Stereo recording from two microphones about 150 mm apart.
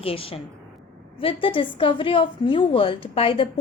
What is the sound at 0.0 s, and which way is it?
A woman's voice, 40° left (ahead or behind).